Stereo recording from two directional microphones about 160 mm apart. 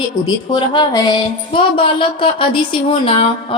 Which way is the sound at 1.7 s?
35° left (ahead or behind).